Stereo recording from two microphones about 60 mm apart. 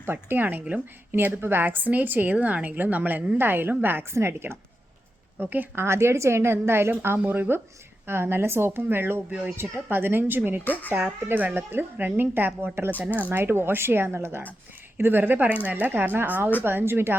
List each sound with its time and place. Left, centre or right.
0.1 s a woman's voice: right
5.8 s a woman's voice: right
13.0 s speech: right
13.4 s a woman's voice: right